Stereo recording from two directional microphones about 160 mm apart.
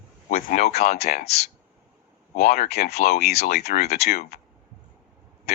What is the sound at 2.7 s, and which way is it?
Speech, 80° left.